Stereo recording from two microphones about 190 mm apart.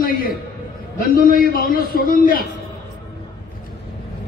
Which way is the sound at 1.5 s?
50° left (ahead or behind).